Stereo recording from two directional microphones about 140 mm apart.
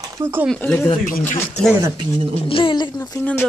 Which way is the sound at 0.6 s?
10° left (ahead or behind).